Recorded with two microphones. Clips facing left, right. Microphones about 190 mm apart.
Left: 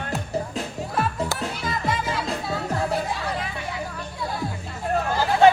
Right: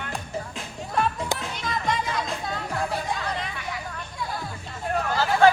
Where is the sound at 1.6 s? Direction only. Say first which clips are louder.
Even; 5° left (ahead or behind).